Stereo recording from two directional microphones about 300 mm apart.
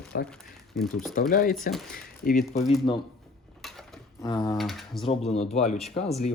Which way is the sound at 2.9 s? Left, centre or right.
Centre.